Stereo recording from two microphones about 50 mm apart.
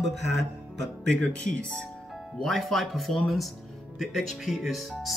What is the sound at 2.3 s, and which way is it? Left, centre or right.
Speech, centre.